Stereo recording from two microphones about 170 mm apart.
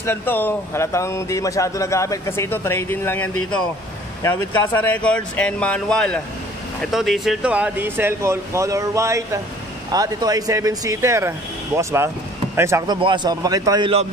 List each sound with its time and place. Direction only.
0.0 s a man's voice: 15° left (ahead or behind); by 14.0 s 30° right (ahead or behind)